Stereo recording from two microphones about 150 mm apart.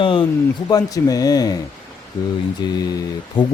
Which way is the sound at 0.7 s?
25° left (ahead or behind).